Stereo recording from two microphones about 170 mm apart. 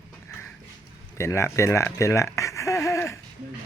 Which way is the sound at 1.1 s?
15° left (ahead or behind).